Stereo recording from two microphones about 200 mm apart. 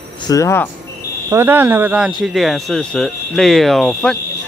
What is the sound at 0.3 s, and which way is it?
Speech, 15° left (ahead or behind).